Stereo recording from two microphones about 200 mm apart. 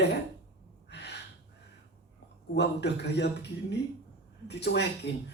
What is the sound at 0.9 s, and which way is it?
Gasp, 60° left (ahead or behind).